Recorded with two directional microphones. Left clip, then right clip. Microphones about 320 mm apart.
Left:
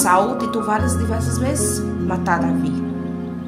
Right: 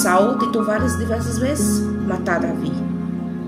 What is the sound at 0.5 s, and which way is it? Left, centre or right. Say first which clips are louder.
Speech: right 1 dB; centre.